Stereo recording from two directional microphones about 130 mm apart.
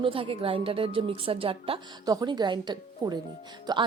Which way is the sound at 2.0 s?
30° right (ahead or behind).